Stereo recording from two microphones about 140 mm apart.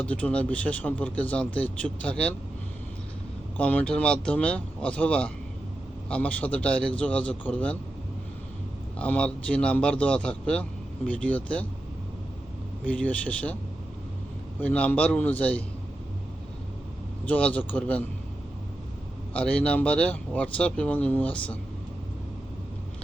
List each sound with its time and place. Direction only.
0.0 s a man's voice: 10° left (ahead or behind)
3.6 s a man's voice: 10° left (ahead or behind)
9.0 s a man's voice: 10° left (ahead or behind)
12.8 s a man's voice: 10° left (ahead or behind)
14.6 s a man's voice: 10° left (ahead or behind)
17.2 s a man's voice: 10° left (ahead or behind)
19.3 s a man's voice: 10° left (ahead or behind)